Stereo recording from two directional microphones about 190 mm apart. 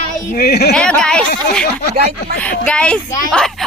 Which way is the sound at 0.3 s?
55° left (ahead or behind).